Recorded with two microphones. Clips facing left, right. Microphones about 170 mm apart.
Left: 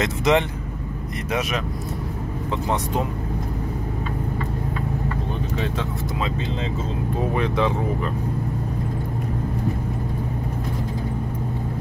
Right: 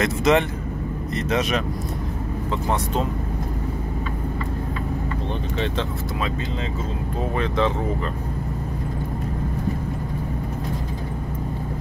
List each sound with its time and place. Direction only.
0.0 s speech: 15° left (ahead or behind)
7.2 s speech: 10° left (ahead or behind)